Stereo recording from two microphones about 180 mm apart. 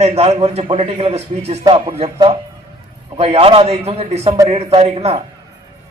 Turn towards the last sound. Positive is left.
turn(degrees=-35)  # may be behind; listen again after turning